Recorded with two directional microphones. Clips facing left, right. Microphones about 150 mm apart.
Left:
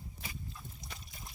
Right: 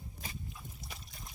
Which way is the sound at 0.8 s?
Centre (ahead or behind).